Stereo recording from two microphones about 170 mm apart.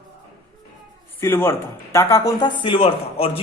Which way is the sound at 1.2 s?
15° left (ahead or behind).